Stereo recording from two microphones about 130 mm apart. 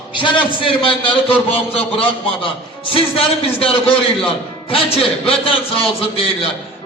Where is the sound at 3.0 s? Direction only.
45° left (ahead or behind).